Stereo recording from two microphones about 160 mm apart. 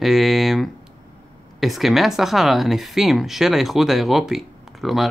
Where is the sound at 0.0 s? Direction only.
Centre (ahead or behind).